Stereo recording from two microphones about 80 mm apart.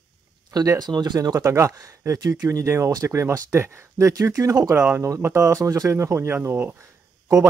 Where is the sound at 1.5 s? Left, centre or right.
Right.